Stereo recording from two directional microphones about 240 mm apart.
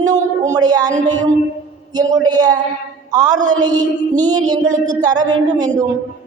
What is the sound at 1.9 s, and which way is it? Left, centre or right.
A man's voice, centre.